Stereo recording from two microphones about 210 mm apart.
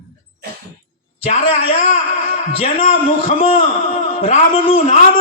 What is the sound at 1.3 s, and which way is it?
A man's voice, 30° left (ahead or behind).